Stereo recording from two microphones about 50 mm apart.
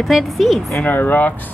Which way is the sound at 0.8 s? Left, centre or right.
Left.